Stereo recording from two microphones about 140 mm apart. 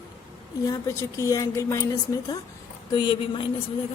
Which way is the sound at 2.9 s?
35° left (ahead or behind).